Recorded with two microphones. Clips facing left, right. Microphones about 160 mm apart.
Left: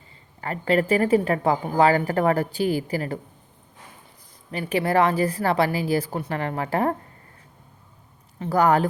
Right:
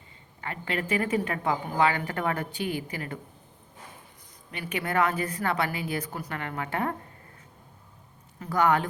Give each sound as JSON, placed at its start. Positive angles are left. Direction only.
{"t": 0.4, "sound": "a woman's voice", "side_deg": 40}
{"t": 4.5, "sound": "a woman's voice", "side_deg": 30}
{"t": 8.4, "sound": "a woman's voice", "side_deg": 35}